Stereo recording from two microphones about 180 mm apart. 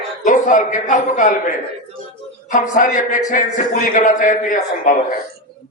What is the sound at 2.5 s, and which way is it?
A man's voice, 45° left (ahead or behind).